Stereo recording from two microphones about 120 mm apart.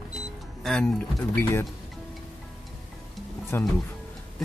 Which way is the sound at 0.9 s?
5° left (ahead or behind).